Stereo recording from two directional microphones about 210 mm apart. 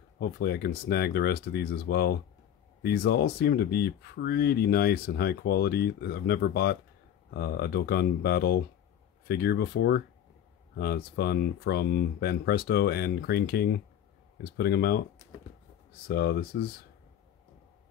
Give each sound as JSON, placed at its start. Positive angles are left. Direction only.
{"t": 0.2, "sound": "speech", "side_deg": 50}
{"t": 16.1, "sound": "speech", "side_deg": 50}